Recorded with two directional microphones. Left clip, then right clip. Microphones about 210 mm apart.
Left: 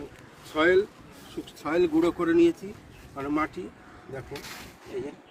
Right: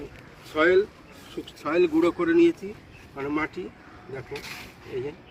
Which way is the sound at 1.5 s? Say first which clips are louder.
Right 2 dB; 30° left (ahead or behind).